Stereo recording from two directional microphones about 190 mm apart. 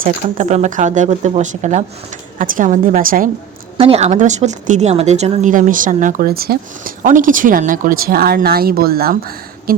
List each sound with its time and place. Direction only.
0.0 s a woman's voice: 40° right (ahead or behind)
3.8 s a woman's voice: 30° right (ahead or behind); by 9.7 s 50° right (ahead or behind)